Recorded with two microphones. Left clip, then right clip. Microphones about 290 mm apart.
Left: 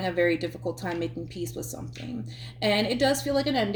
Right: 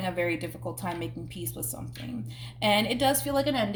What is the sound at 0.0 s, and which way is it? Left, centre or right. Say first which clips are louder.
Speech: left 4 dB; right.